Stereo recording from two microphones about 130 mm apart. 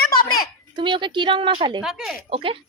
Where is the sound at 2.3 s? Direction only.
45° right (ahead or behind).